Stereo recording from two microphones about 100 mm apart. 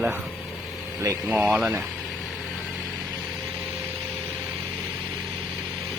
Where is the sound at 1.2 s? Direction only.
5° right (ahead or behind).